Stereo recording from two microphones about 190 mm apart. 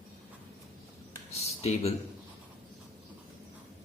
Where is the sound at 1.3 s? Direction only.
35° left (ahead or behind).